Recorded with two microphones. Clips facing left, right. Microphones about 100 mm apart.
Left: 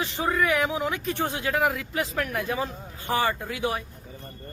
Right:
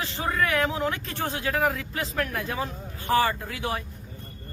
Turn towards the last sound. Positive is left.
turn(degrees=15)  # may be behind; listen again after turning